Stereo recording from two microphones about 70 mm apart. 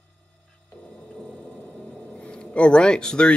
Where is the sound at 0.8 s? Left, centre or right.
Centre.